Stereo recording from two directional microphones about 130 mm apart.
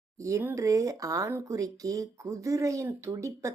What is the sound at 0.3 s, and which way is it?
Speech, 20° right (ahead or behind).